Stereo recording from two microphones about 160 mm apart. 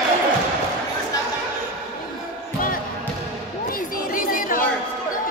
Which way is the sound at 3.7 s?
65° left (ahead or behind).